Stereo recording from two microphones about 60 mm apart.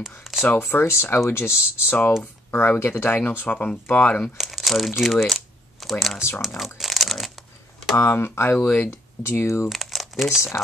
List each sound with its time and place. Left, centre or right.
0.4 s speech: left
3.4 s speech: left
4.4 s speech: centre
6.4 s crumpling: centre
7.9 s speech: left
8.5 s speech: left
9.2 s speech: left
9.7 s crumpling: centre